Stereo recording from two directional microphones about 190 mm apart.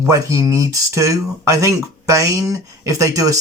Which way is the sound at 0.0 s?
15° right (ahead or behind).